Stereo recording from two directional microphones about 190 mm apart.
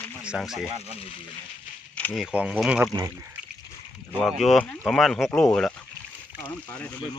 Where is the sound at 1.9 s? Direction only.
5° left (ahead or behind).